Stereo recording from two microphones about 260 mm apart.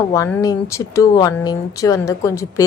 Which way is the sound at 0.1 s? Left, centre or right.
Centre.